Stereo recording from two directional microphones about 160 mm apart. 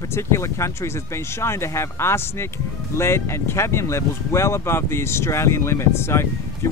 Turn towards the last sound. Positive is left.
turn(degrees=15)  # may be behind; listen again after turning